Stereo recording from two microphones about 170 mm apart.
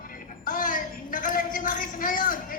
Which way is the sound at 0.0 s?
55° left (ahead or behind).